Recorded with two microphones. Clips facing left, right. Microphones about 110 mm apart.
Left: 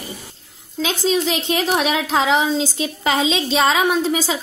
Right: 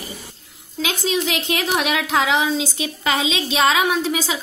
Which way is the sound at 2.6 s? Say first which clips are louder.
Left 2 dB; 5° right (ahead or behind).